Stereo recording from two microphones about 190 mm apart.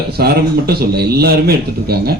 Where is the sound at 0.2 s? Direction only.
55° right (ahead or behind).